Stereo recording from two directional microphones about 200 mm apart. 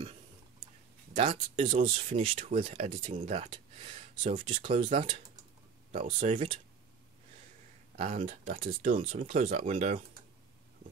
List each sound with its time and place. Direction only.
1.1 s speech: 25° right (ahead or behind)
4.5 s speech: 25° right (ahead or behind)
6.1 s speech: 35° right (ahead or behind)
7.9 s speech: 40° right (ahead or behind)